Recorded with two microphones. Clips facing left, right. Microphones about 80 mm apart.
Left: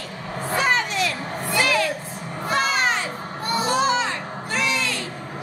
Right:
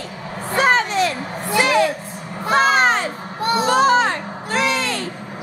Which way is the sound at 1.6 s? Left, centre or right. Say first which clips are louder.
Right 5 dB; right.